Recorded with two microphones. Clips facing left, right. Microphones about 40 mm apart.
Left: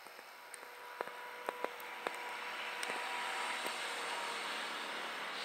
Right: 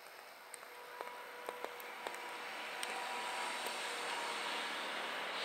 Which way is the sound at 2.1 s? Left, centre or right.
Left.